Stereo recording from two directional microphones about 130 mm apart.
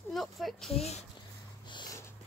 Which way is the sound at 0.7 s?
55° left (ahead or behind).